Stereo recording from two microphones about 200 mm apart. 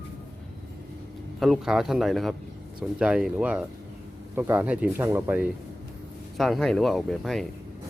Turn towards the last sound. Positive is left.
turn(degrees=0)  # may be behind; listen again after turning